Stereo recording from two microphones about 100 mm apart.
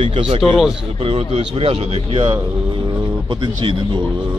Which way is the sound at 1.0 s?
75° right (ahead or behind).